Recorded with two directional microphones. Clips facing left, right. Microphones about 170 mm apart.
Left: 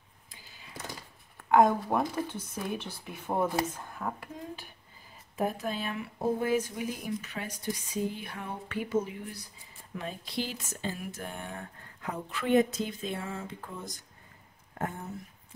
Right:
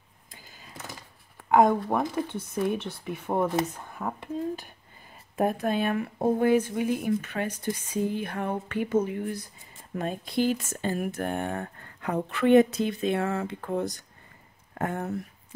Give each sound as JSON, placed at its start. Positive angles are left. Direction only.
{"t": 1.5, "sound": "speech", "side_deg": 0}
{"t": 5.3, "sound": "speech", "side_deg": -55}